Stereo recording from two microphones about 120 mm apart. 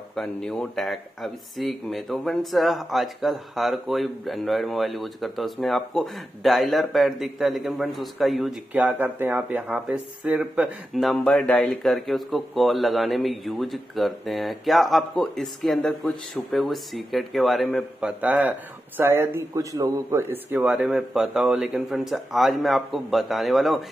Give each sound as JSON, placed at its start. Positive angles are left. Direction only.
{"t": 0.1, "sound": "speech", "side_deg": 5}
{"t": 8.7, "sound": "speech", "side_deg": -15}
{"t": 18.2, "sound": "a man's voice", "side_deg": -15}
{"t": 20.6, "sound": "speech", "side_deg": -5}